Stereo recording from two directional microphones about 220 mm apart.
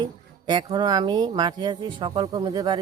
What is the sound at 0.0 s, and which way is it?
Speech, 20° right (ahead or behind).